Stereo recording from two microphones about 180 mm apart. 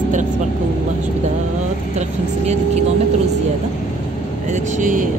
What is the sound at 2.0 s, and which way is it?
Speech, 40° right (ahead or behind).